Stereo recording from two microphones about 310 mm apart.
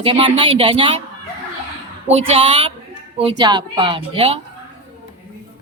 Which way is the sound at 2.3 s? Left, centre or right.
Centre.